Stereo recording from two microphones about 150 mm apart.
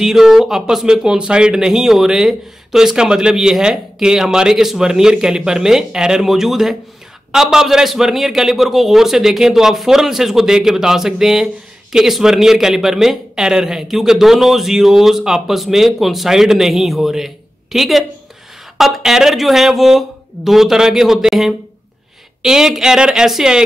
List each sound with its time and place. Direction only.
0.0 s a man's voice: 5° right (ahead or behind)